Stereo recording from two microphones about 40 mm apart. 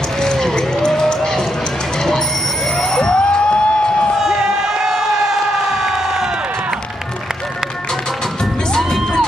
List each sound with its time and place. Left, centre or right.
0.2 s a sound: centre
2.8 s bicycle bell: centre
4.2 s crowd: centre